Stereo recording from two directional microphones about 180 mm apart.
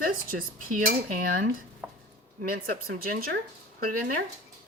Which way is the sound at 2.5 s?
55° right (ahead or behind).